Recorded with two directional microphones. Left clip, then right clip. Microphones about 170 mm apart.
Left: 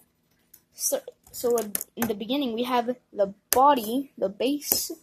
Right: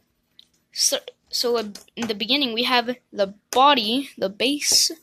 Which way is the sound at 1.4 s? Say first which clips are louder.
Right 3 dB; 15° right (ahead or behind).